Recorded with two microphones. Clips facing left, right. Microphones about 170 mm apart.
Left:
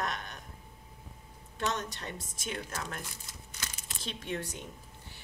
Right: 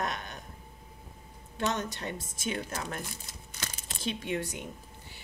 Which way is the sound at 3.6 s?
30° right (ahead or behind).